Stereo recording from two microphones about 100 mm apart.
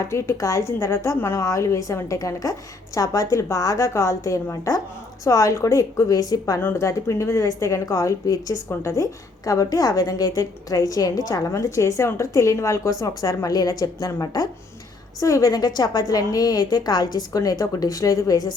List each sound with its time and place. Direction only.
0.0 s a woman's voice: 25° left (ahead or behind)
6.6 s a woman's voice: 25° left (ahead or behind)